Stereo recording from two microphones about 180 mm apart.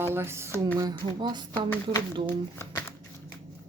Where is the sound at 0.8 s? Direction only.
20° right (ahead or behind).